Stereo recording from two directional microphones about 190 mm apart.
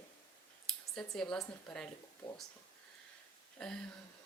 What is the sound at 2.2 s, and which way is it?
Speech, 25° left (ahead or behind).